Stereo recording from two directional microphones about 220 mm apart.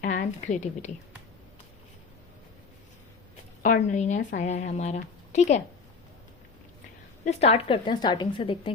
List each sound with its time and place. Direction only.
0.0 s a woman's voice: 40° left (ahead or behind)
3.6 s a woman's voice: 35° left (ahead or behind)
7.3 s a woman's voice: 30° left (ahead or behind)